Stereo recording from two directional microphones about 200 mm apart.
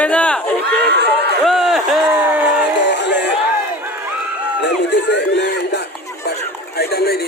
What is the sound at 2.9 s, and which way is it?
Crowd, 60° left (ahead or behind).